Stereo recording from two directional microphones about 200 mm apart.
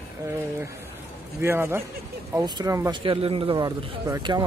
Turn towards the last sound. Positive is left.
turn(degrees=-15)  # may be behind; listen again after turning